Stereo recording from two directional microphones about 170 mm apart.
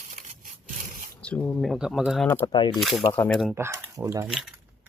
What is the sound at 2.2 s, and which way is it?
Speech, 15° left (ahead or behind).